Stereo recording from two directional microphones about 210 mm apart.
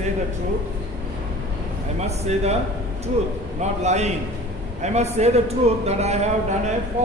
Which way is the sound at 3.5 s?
30° right (ahead or behind).